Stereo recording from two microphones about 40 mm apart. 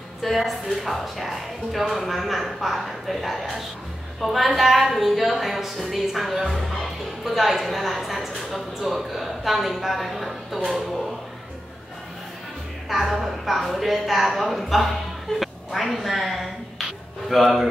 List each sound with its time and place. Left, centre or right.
0.2 s speech: centre
13.1 s a woman's voice: centre